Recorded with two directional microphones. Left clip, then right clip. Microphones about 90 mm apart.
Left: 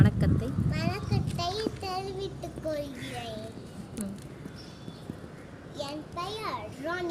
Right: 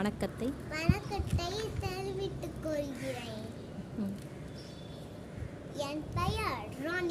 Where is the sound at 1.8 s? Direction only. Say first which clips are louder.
Left 5 dB; 20° right (ahead or behind).